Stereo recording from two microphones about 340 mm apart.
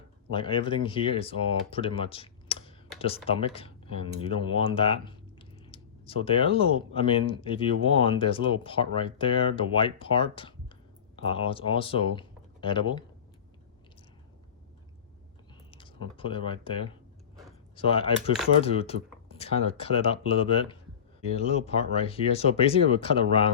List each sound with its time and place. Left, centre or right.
0.3 s speech: centre
15.7 s speech: centre